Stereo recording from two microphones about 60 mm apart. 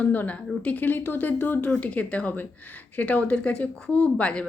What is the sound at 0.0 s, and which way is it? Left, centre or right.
Speech, left.